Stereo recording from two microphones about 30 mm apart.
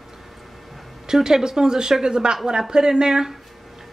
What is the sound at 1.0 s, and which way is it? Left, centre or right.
Speech, centre.